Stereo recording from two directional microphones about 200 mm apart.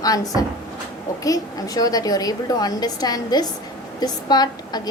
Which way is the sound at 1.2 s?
20° left (ahead or behind).